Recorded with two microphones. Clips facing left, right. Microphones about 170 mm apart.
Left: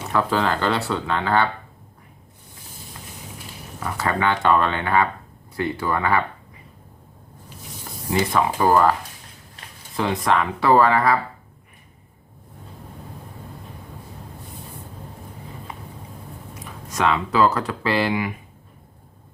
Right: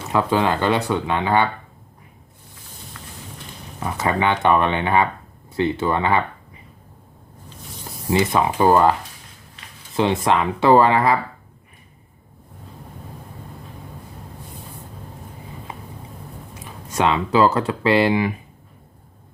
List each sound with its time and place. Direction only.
0.1 s speech: 20° right (ahead or behind)
3.8 s speech: 20° right (ahead or behind)
8.2 s speech: 20° right (ahead or behind)
16.6 s speech: 30° right (ahead or behind)